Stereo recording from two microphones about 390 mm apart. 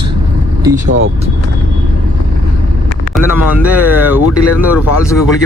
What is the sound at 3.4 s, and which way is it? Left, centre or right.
Speech, centre.